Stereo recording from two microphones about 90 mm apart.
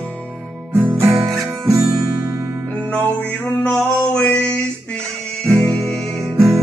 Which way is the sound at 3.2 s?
20° left (ahead or behind).